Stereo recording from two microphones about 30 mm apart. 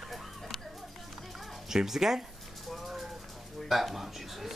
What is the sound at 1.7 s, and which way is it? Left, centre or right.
Speech, centre.